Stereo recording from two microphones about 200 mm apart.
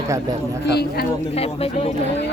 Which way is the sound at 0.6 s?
55° left (ahead or behind).